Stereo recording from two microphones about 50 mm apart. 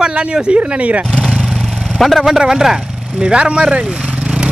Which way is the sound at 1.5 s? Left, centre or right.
Centre.